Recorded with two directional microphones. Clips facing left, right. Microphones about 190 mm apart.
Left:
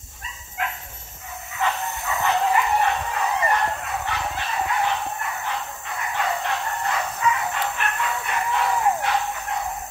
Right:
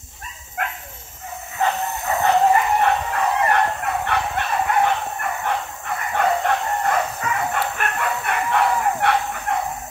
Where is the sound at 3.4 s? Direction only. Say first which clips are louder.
Right 4 dB; 60° right (ahead or behind).